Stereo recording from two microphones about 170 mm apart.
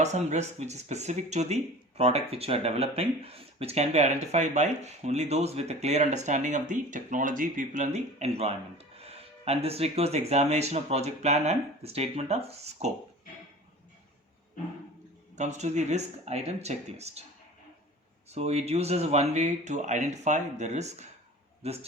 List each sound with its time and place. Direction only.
0.0 s speech: 40° right (ahead or behind)
15.4 s speech: 40° right (ahead or behind)
18.3 s speech: 40° right (ahead or behind)